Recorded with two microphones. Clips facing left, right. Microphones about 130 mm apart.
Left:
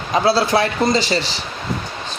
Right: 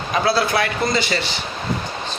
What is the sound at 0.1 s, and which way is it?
A man's voice, 30° left (ahead or behind).